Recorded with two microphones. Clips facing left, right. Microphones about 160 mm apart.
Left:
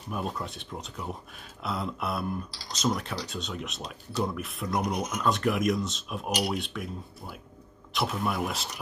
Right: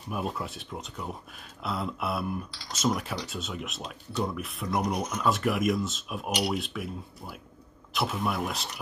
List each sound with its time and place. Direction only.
0.1 s cutlery: 5° right (ahead or behind)
2.7 s speech: 5° right (ahead or behind)
3.3 s cutlery: 5° right (ahead or behind)
4.9 s speech: 15° left (ahead or behind)
5.2 s cutlery: 5° right (ahead or behind)